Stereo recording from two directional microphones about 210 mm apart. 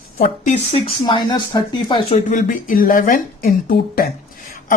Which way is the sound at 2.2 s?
40° left (ahead or behind).